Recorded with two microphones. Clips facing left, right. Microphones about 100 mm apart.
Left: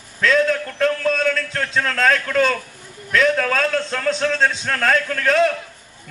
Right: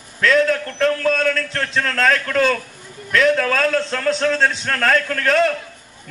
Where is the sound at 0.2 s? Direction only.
Centre (ahead or behind).